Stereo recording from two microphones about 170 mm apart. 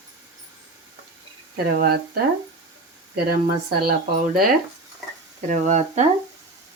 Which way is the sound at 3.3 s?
65° right (ahead or behind).